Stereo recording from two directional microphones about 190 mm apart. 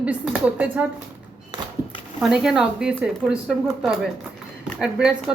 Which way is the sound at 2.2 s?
5° right (ahead or behind).